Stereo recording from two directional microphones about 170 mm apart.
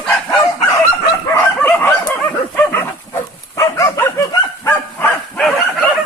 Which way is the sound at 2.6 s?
10° left (ahead or behind).